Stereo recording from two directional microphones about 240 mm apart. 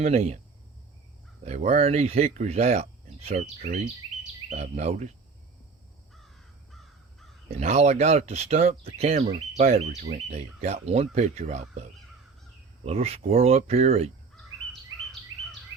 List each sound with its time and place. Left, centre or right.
0.0 s speech: right
1.5 s speech: right
6.1 s crow: centre
7.5 s speech: right
14.3 s bird vocalization: centre